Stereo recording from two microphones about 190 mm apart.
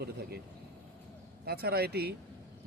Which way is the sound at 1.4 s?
55° right (ahead or behind).